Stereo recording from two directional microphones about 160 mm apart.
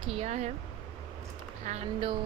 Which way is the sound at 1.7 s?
50° right (ahead or behind).